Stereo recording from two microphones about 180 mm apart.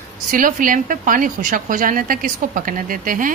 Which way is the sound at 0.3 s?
50° right (ahead or behind).